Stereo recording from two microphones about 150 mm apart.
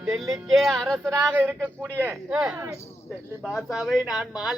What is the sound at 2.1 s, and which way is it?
Speech, centre (ahead or behind).